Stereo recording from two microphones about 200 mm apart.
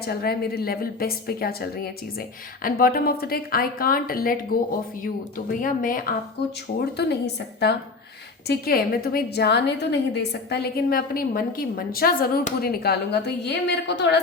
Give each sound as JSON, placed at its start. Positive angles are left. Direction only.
{"t": 0.0, "sound": "a woman's voice", "side_deg": 50}
{"t": 5.5, "sound": "a woman's voice", "side_deg": 40}
{"t": 6.9, "sound": "a woman's voice", "side_deg": 55}
{"t": 8.4, "sound": "a woman's voice", "side_deg": 50}